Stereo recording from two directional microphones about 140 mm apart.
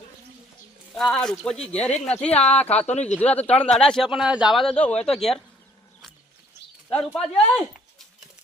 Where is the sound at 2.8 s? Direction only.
50° left (ahead or behind).